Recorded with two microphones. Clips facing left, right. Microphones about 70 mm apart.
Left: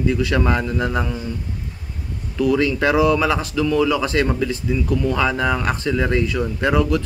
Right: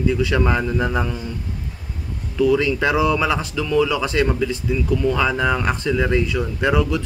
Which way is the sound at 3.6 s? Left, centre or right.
Centre.